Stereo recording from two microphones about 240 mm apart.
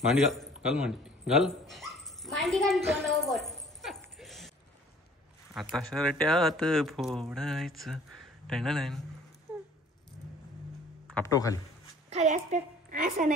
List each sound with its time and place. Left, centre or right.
0.1 s speech: centre
0.6 s dog: centre
4.2 s a sound: centre
5.5 s speech: centre
11.2 s a man's voice: centre
12.1 s a woman's voice: right